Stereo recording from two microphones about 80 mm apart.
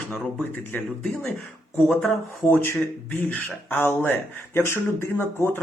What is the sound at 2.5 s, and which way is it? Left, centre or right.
A man's voice, left.